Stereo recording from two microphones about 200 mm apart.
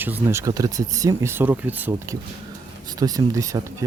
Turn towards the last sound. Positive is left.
turn(degrees=-15)  # may be behind; listen again after turning